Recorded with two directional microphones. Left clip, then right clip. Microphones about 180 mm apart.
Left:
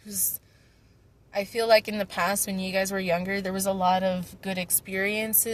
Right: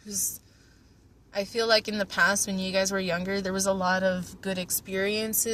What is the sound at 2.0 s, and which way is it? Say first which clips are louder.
Speech: right 3 dB; 20° left (ahead or behind).